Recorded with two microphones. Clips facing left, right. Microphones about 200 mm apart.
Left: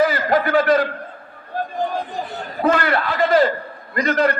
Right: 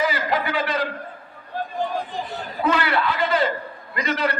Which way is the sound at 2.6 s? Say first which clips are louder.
Left 3 dB; 50° left (ahead or behind).